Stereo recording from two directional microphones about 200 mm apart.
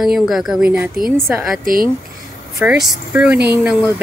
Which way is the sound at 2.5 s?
5° right (ahead or behind).